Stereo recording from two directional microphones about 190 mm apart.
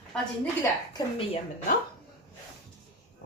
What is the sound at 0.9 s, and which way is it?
Speech, 30° left (ahead or behind).